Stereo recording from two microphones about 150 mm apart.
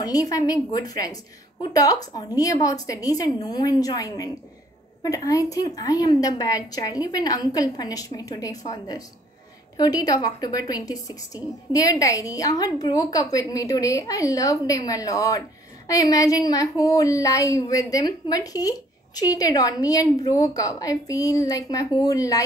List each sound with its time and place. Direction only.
0.0 s a woman's voice: 25° left (ahead or behind)